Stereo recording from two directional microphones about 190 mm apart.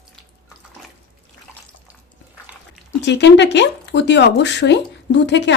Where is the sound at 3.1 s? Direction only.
65° left (ahead or behind).